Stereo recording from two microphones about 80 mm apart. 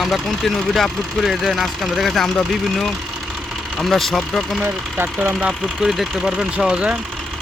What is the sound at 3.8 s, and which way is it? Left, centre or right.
Speech, centre.